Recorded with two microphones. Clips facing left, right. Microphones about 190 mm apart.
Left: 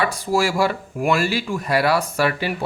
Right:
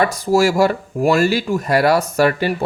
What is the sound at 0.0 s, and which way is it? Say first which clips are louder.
Speech: right 5 dB; 40° right (ahead or behind).